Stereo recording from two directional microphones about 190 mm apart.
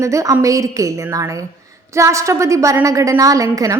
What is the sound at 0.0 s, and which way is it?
A woman's voice, 15° right (ahead or behind).